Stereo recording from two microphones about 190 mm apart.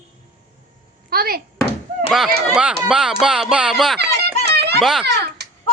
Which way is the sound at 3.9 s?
60° right (ahead or behind).